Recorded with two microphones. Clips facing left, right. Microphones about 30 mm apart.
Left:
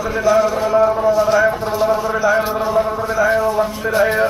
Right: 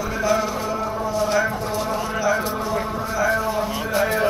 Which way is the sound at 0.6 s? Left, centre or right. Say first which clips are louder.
Left 11 dB; centre.